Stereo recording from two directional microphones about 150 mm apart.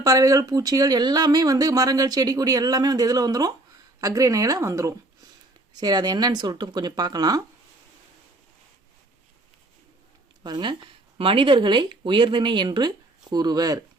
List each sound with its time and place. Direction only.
0.0 s speech: 20° right (ahead or behind)
10.4 s speech: 30° right (ahead or behind)